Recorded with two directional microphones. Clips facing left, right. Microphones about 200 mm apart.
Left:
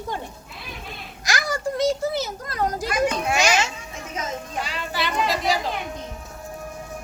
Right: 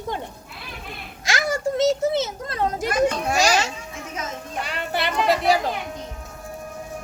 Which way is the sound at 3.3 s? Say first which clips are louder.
Right 1 dB; 35° right (ahead or behind).